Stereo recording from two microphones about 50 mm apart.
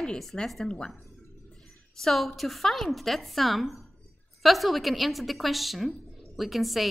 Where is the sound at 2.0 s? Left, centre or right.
Centre.